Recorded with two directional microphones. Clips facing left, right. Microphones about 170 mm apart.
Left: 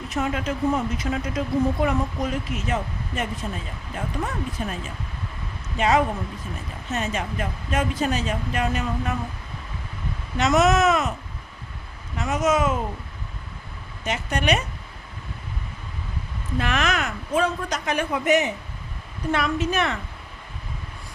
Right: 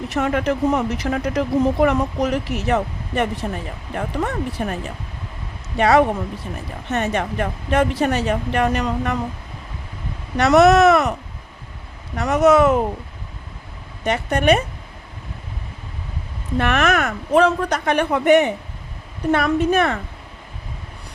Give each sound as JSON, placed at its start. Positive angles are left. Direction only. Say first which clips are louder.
{"t": 0.1, "sound": "speech", "louder": "right 6 dB", "side_deg": -65}
{"t": 10.3, "sound": "speech", "louder": "right 7 dB", "side_deg": -65}
{"t": 12.1, "sound": "speech", "louder": "right 8 dB", "side_deg": -65}
{"t": 14.0, "sound": "speech", "louder": "right 7 dB", "side_deg": -60}
{"t": 16.6, "sound": "a woman's voice", "louder": "right 6 dB", "side_deg": -60}